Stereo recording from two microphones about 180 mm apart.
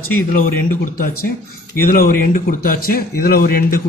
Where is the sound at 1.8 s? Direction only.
55° left (ahead or behind).